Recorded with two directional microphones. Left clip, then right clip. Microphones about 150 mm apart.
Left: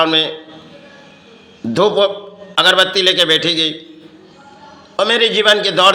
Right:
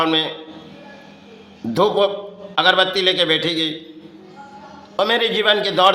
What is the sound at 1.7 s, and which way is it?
A man's voice, 10° left (ahead or behind).